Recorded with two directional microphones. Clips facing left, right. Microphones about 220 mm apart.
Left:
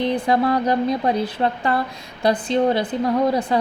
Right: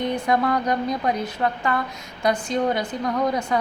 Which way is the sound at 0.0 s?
30° left (ahead or behind).